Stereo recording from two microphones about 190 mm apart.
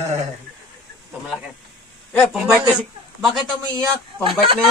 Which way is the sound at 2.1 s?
Centre (ahead or behind).